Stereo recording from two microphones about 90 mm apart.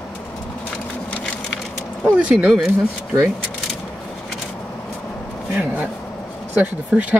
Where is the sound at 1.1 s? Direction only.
15° left (ahead or behind).